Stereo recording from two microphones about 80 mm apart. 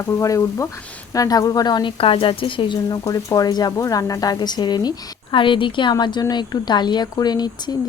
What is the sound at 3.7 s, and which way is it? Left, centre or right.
Speech, left.